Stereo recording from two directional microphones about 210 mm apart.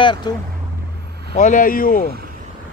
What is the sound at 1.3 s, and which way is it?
Speech, 35° left (ahead or behind).